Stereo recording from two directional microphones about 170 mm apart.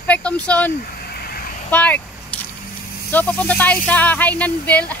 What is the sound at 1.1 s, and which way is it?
Vehicle, 65° left (ahead or behind).